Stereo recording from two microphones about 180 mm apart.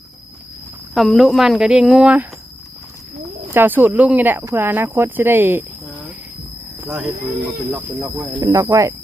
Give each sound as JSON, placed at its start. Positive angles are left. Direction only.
{"t": 0.9, "sound": "speech", "side_deg": 0}
{"t": 3.5, "sound": "speech", "side_deg": -10}
{"t": 6.8, "sound": "speech", "side_deg": -5}
{"t": 8.4, "sound": "speech", "side_deg": -20}